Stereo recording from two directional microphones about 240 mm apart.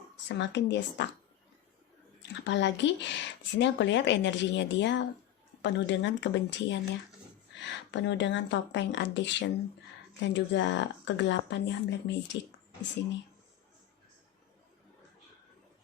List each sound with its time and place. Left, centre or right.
0.3 s speech: left
2.4 s speech: left